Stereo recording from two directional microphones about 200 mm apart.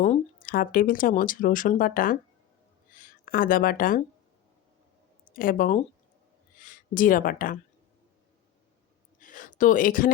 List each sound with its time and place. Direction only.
0.4 s speech: 45° left (ahead or behind)
5.3 s speech: 45° left (ahead or behind)
9.2 s a sound: 40° left (ahead or behind)